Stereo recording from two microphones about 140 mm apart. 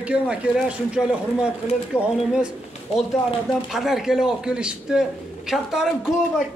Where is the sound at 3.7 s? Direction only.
5° right (ahead or behind).